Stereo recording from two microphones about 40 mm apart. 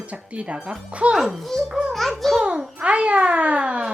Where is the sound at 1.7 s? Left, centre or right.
Right.